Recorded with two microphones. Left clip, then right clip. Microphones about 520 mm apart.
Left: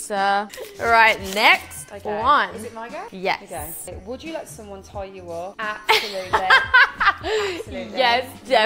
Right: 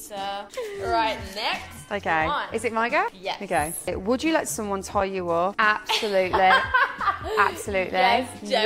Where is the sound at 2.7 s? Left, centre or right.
Right.